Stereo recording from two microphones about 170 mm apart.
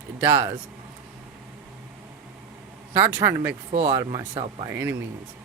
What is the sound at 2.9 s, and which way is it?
Speech, 10° right (ahead or behind).